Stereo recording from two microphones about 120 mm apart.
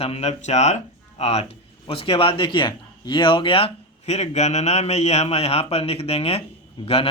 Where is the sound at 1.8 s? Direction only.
50° left (ahead or behind).